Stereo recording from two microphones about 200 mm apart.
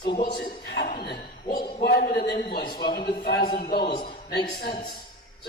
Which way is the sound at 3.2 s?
50° left (ahead or behind).